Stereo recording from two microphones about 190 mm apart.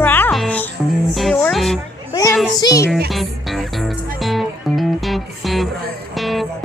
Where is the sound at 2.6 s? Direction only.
15° left (ahead or behind).